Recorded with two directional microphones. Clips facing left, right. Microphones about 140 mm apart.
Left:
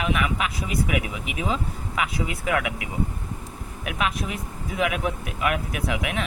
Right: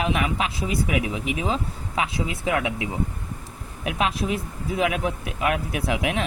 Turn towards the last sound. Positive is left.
turn(degrees=-30)  # may be behind; listen again after turning